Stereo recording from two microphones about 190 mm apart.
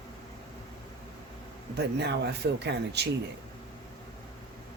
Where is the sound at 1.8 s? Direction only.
60° right (ahead or behind).